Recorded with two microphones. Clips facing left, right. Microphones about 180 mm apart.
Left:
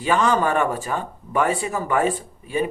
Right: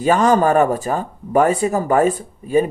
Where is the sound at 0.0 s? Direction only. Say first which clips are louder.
Right 5 dB; 40° right (ahead or behind).